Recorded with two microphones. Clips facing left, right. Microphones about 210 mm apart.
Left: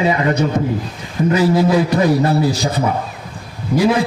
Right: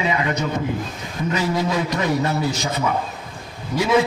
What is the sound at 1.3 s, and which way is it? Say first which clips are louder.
A man's voice: left 8 dB; 35° left (ahead or behind).